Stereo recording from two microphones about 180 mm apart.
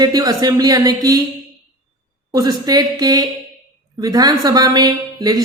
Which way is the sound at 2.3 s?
20° right (ahead or behind).